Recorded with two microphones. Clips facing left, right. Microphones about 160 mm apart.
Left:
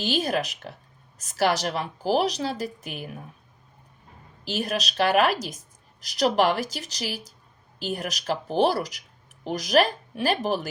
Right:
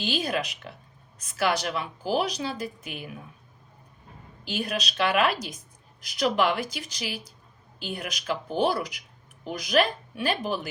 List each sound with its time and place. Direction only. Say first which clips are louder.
0.1 s speech: left 4 dB; 40° left (ahead or behind)
4.4 s speech: left 2 dB; 40° left (ahead or behind)